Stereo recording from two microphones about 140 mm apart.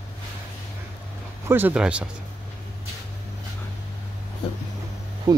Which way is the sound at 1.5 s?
15° right (ahead or behind).